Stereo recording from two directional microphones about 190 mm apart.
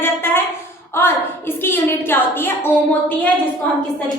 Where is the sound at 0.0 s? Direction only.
10° left (ahead or behind).